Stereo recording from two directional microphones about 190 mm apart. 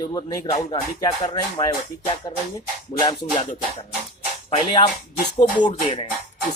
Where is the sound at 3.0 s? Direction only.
25° left (ahead or behind).